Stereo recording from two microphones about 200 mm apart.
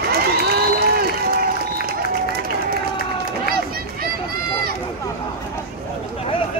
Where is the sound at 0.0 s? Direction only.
50° right (ahead or behind).